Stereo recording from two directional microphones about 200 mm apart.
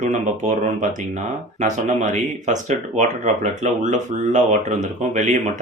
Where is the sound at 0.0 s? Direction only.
35° right (ahead or behind).